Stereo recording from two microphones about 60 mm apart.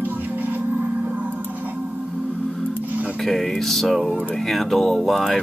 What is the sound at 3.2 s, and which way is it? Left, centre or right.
Speech, centre.